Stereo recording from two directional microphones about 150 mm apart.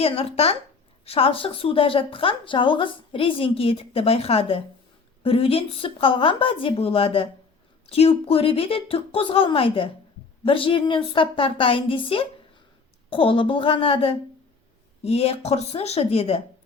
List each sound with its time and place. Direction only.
0.0 s speech: 40° left (ahead or behind)